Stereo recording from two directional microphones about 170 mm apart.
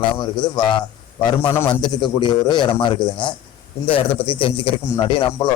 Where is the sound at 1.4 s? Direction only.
15° left (ahead or behind).